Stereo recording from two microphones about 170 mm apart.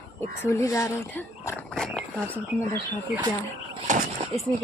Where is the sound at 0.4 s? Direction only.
15° left (ahead or behind).